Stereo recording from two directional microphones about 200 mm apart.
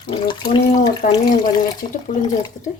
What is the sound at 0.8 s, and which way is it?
Speech, 20° left (ahead or behind).